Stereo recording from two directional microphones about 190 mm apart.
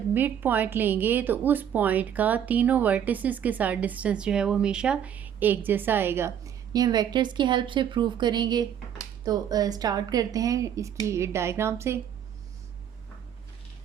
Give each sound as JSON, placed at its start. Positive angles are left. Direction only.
{"t": 0.1, "sound": "a woman's voice", "side_deg": -10}